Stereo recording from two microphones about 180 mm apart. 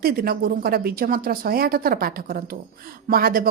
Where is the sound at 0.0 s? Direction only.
55° right (ahead or behind).